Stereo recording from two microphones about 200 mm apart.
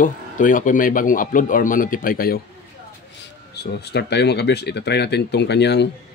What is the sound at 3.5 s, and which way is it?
Speech, 55° left (ahead or behind).